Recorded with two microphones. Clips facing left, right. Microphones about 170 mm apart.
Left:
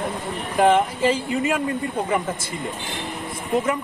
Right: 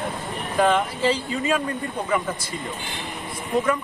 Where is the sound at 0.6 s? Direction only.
20° left (ahead or behind).